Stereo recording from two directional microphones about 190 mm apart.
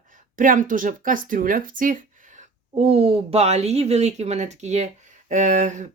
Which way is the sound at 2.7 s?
35° right (ahead or behind).